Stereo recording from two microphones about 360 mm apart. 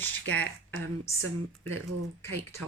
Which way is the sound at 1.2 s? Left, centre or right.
Right.